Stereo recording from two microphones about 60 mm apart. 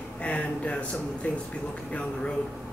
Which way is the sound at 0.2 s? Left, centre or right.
Centre.